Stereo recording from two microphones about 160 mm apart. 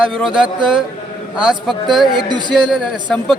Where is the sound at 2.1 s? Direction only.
30° right (ahead or behind).